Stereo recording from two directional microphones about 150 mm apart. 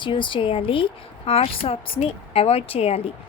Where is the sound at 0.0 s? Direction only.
35° left (ahead or behind).